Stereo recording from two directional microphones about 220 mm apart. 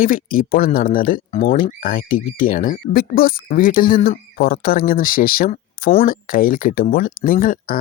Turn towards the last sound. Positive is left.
turn(degrees=40)  # may be behind; listen again after turning